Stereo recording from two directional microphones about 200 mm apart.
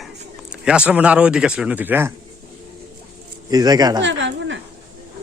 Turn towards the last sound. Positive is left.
turn(degrees=-65)  # may be behind; listen again after turning